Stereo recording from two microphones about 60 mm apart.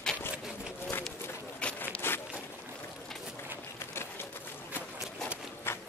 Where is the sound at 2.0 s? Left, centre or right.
Left.